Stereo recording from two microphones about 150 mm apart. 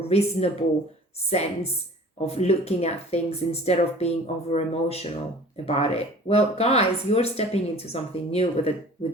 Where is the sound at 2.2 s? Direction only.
45° left (ahead or behind).